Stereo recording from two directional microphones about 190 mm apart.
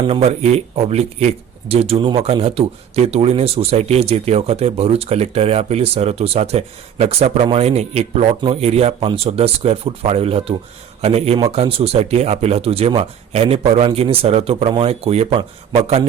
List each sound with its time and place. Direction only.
0.1 s speech: 35° right (ahead or behind)